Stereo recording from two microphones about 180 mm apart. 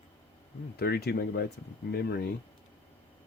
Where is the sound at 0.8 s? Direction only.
65° left (ahead or behind).